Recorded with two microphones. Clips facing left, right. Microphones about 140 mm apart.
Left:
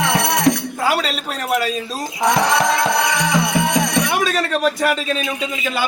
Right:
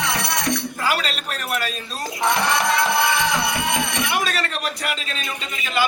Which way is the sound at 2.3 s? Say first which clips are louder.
Left 4 dB; 90° left.